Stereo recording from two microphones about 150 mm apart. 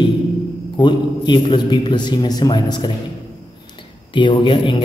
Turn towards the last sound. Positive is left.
turn(degrees=35)  # may be behind; listen again after turning